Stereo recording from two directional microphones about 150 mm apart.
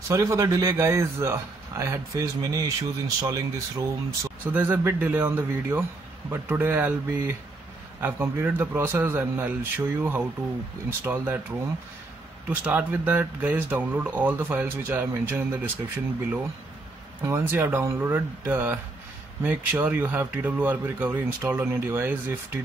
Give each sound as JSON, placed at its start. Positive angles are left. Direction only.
{"t": 0.1, "sound": "a man's voice", "side_deg": -20}
{"t": 12.4, "sound": "speech", "side_deg": -10}